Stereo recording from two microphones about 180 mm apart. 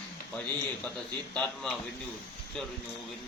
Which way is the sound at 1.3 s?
5° left (ahead or behind).